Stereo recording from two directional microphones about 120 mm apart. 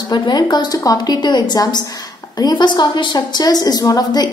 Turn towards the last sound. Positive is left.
turn(degrees=30)  # may be behind; listen again after turning